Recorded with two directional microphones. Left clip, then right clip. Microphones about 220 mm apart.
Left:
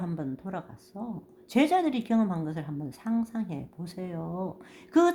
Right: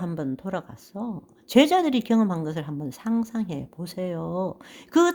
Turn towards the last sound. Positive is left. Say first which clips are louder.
# right 3 dB
turn(degrees=-35)  # may be behind; listen again after turning